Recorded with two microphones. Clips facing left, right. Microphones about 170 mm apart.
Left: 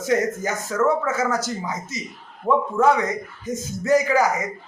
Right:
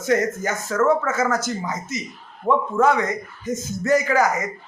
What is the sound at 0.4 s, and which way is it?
Speech, 15° left (ahead or behind).